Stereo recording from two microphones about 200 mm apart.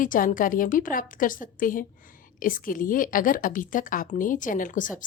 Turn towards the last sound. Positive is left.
turn(degrees=40)  # may be behind; listen again after turning